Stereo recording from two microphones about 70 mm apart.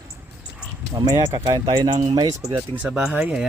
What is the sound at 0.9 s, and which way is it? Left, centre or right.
Speech, right.